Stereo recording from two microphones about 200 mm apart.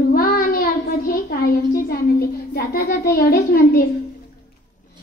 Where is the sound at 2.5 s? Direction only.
50° left (ahead or behind).